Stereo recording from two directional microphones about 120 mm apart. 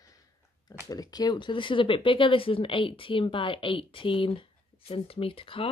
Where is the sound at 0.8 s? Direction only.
30° left (ahead or behind).